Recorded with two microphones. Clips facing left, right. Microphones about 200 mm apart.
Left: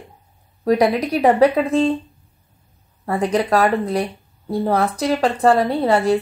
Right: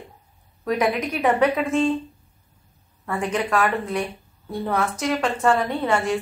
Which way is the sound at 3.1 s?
35° left (ahead or behind).